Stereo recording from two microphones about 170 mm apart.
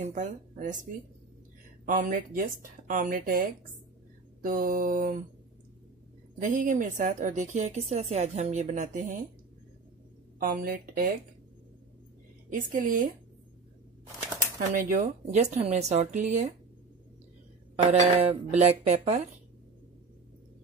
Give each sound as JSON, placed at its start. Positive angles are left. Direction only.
{"t": 0.1, "sound": "a woman's voice", "side_deg": -45}
{"t": 1.9, "sound": "a woman's voice", "side_deg": -50}
{"t": 6.4, "sound": "a woman's voice", "side_deg": -50}
{"t": 10.4, "sound": "speech", "side_deg": -60}
{"t": 12.4, "sound": "a woman's voice", "side_deg": -55}
{"t": 14.7, "sound": "a woman's voice", "side_deg": -50}
{"t": 17.9, "sound": "speech", "side_deg": -40}